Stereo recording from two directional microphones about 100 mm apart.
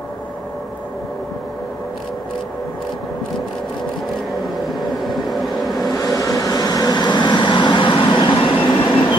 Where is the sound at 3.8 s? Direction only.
Centre (ahead or behind).